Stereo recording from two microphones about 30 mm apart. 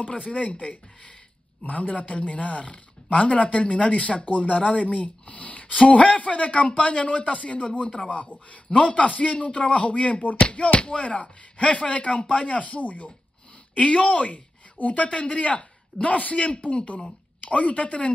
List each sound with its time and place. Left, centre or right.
0.2 s speech: left
1.7 s speech: left
11.1 s speech: left
12.2 s speech: left
12.5 s speech: left
12.8 s speech: left
13.7 s a woman's voice: left
17.5 s speech: left